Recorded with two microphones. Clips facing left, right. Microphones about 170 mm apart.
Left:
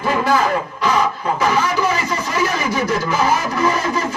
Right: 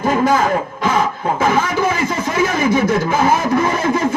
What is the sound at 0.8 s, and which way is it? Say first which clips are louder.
Speech: right 1 dB; 50° right (ahead or behind).